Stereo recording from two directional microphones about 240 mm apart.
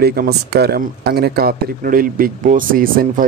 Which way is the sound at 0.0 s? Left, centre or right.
Right.